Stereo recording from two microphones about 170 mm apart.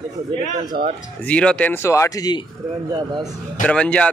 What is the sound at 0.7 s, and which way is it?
Speech, 65° right (ahead or behind).